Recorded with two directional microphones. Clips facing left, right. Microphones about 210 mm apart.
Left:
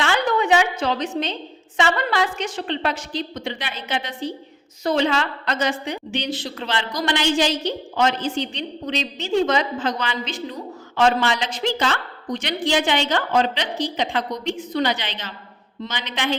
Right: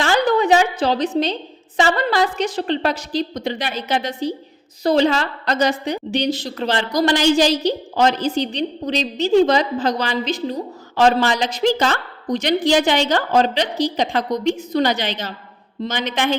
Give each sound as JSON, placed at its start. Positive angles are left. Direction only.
{"t": 0.0, "sound": "a woman's voice", "side_deg": -35}